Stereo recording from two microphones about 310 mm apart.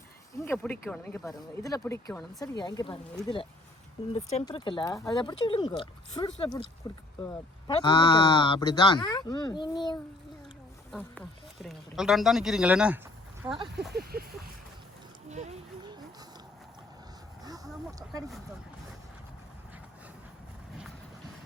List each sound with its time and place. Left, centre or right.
0.3 s speech: centre
4.3 s speech: centre
7.7 s speech: centre
10.9 s speech: centre
13.4 s speech: centre
13.9 s speech: right
15.3 s a sound: right
17.4 s a sound: centre
18.0 s vehicle: centre